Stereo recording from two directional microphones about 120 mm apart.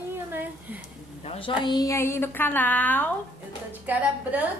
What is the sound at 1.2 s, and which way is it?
Speech, 50° left (ahead or behind).